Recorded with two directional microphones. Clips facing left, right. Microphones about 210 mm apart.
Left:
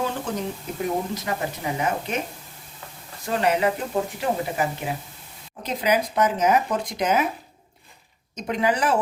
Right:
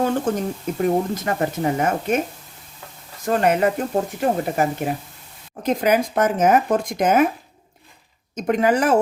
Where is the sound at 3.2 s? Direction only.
45° right (ahead or behind).